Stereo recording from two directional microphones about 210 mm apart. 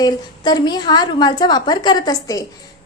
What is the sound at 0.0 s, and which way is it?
A woman's voice, 20° left (ahead or behind).